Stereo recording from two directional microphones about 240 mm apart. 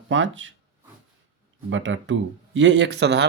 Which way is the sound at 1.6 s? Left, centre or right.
Right.